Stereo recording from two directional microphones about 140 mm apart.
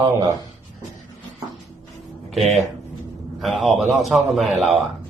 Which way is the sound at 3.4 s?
Centre (ahead or behind).